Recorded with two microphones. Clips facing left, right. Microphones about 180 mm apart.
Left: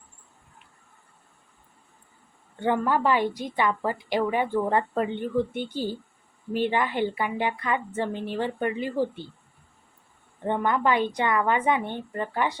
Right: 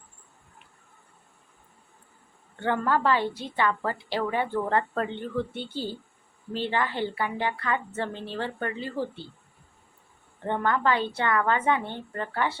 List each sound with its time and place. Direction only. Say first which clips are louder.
2.6 s a woman's voice: left 2 dB; 15° left (ahead or behind)
10.4 s a woman's voice: left 1 dB; 15° left (ahead or behind)